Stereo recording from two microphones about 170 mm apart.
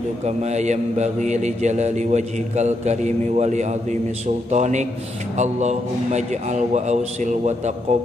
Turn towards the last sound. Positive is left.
turn(degrees=-45)  # may be behind; listen again after turning